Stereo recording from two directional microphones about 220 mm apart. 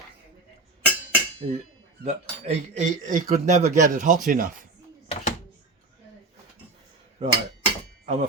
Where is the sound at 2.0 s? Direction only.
30° right (ahead or behind).